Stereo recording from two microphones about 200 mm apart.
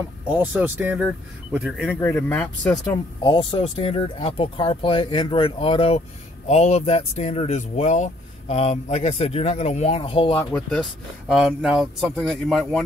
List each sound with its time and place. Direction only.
0.3 s speech: 10° right (ahead or behind)
1.9 s speech: 10° left (ahead or behind)
3.2 s speech: 25° left (ahead or behind)
10.5 s speech: centre (ahead or behind)